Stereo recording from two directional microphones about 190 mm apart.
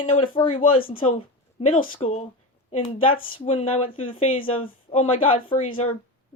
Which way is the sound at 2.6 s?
30° left (ahead or behind).